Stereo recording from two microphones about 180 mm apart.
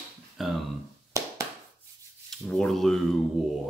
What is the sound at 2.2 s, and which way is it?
Speech, 5° left (ahead or behind).